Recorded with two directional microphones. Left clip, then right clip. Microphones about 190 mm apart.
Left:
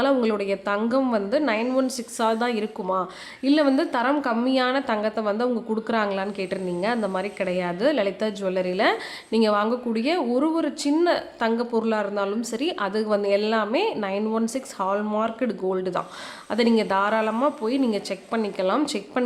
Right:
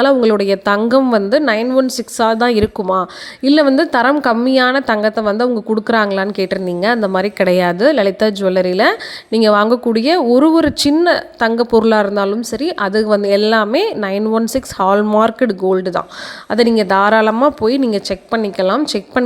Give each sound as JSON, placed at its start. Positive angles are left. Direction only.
{"t": 0.0, "sound": "a woman's voice", "side_deg": -35}